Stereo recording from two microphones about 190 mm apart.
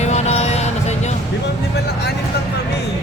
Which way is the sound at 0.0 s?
35° left (ahead or behind).